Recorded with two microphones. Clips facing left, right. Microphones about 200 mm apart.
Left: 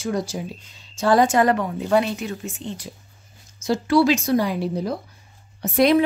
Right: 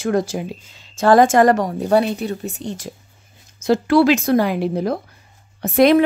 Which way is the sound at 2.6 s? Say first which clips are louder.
Right 4 dB; 90° right.